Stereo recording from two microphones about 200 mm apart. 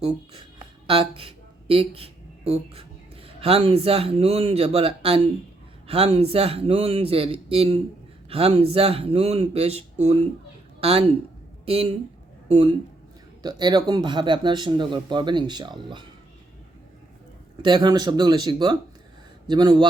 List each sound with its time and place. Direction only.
0.9 s a woman's voice: 25° right (ahead or behind)
17.6 s speech: 20° right (ahead or behind)